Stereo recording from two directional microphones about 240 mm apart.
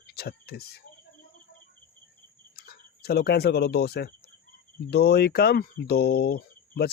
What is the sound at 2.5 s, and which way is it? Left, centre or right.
Speech, left.